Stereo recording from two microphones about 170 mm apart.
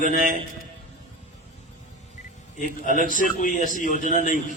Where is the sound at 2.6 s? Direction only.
55° left (ahead or behind).